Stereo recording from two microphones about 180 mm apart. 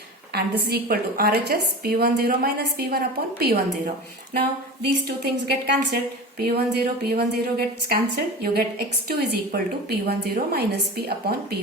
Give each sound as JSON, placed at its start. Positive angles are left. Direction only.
{"t": 0.3, "sound": "a woman's voice", "side_deg": -60}
{"t": 5.0, "sound": "a woman's voice", "side_deg": -65}